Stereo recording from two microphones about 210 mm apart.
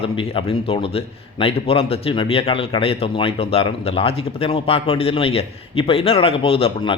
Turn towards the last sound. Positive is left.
turn(degrees=25)  # may be behind; listen again after turning